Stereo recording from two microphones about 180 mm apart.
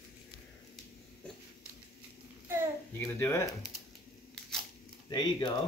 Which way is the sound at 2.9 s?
15° left (ahead or behind).